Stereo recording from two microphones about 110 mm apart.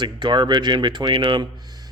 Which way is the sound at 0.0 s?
45° right (ahead or behind).